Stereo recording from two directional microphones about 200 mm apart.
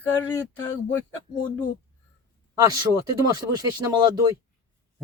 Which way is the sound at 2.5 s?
20° right (ahead or behind).